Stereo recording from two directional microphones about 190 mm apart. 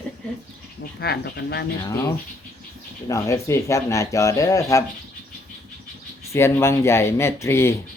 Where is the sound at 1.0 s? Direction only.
60° left (ahead or behind).